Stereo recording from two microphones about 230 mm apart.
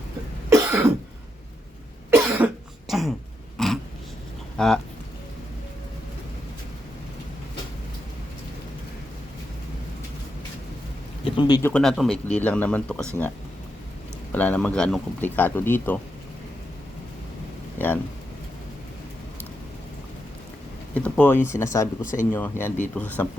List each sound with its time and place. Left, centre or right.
0.5 s cough: centre
2.0 s cough: centre
3.6 s a sound: centre
4.5 s speech: centre
11.3 s speech: centre
11.7 s speech: centre
14.3 s speech: centre
17.7 s speech: centre
20.9 s speech: centre
22.0 s speech: left
22.3 s speech: centre